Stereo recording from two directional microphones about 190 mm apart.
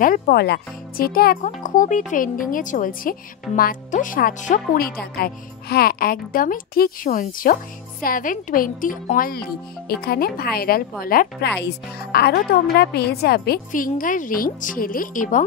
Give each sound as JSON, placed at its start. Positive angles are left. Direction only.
{"t": 0.0, "sound": "a child's voice", "side_deg": 50}